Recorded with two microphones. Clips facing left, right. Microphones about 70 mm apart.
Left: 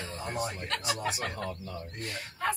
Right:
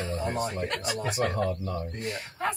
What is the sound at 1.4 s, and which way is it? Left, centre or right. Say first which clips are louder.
Speech: right 8 dB; right.